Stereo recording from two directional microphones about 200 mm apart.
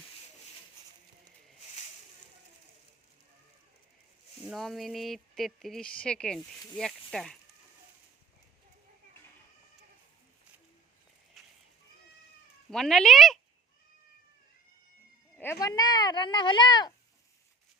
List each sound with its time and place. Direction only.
4.4 s speech: centre (ahead or behind)
11.4 s a sound: centre (ahead or behind)
12.7 s speech: centre (ahead or behind)
15.4 s speech: 15° left (ahead or behind)